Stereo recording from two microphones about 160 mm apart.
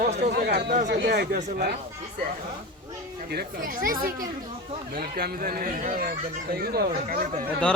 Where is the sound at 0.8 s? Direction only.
90° right.